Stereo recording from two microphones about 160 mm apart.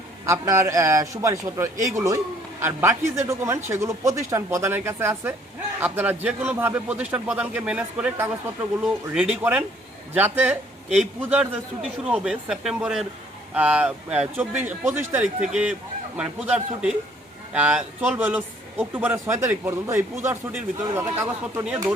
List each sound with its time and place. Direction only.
0.3 s a man's voice: 20° right (ahead or behind)